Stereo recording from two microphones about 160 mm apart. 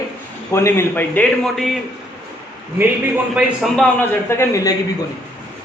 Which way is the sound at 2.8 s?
10° right (ahead or behind).